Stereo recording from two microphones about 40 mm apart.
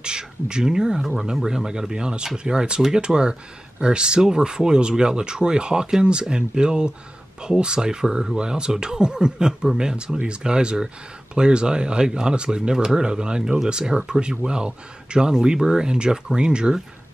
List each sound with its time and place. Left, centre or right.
0.0 s speech: right